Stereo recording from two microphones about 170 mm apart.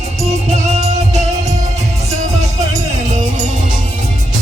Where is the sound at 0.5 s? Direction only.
40° right (ahead or behind).